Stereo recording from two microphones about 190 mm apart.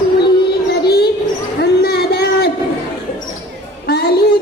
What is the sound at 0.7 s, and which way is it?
Child singing, 55° left (ahead or behind).